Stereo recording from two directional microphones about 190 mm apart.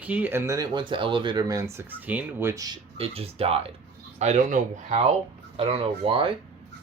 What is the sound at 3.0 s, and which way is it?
Speech, 30° right (ahead or behind).